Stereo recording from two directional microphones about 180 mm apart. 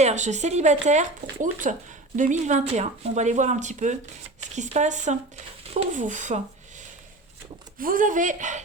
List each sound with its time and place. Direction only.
0.0 s speech: 40° right (ahead or behind)
7.8 s speech: 50° right (ahead or behind)